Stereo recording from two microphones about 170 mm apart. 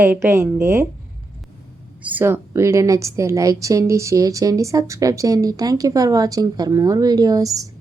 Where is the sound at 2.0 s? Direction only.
10° right (ahead or behind).